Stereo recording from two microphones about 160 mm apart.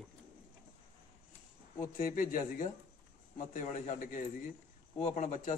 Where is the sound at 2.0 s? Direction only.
60° left (ahead or behind).